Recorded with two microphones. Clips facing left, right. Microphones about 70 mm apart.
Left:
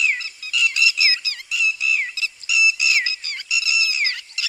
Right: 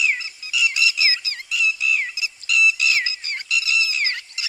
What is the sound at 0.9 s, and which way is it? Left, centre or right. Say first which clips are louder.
Music: left 1 dB; right.